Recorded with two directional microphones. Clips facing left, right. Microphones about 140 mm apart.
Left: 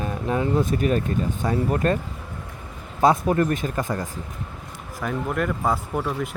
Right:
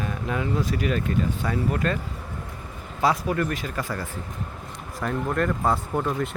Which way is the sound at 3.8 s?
20° left (ahead or behind).